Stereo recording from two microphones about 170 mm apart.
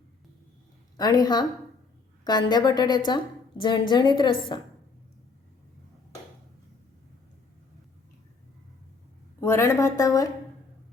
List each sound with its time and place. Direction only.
0.9 s a woman's voice: 25° left (ahead or behind)
9.4 s a woman's voice: 15° left (ahead or behind)